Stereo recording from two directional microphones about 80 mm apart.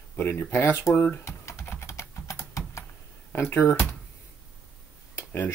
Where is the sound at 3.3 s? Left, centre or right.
Left.